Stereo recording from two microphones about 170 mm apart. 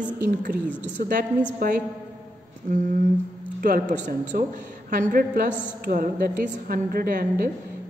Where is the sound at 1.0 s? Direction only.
65° right (ahead or behind).